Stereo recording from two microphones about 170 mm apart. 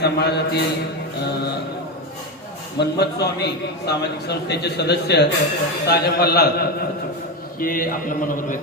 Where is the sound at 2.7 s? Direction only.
75° left (ahead or behind).